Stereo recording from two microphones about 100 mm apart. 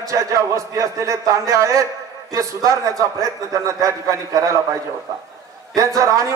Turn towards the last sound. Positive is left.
turn(degrees=-35)  # may be behind; listen again after turning